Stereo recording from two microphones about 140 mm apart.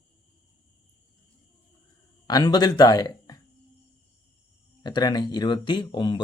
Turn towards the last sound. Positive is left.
turn(degrees=35)  # may be behind; listen again after turning